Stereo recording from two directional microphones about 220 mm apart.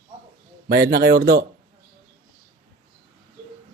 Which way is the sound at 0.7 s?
45° right (ahead or behind).